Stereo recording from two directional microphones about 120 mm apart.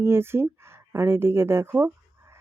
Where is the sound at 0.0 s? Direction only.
20° right (ahead or behind).